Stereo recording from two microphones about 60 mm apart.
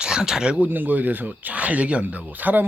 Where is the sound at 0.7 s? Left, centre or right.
Right.